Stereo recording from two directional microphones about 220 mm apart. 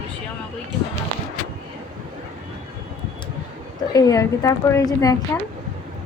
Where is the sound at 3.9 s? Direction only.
15° left (ahead or behind).